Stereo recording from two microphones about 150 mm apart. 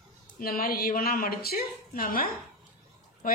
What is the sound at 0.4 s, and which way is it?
A woman's voice, 80° left.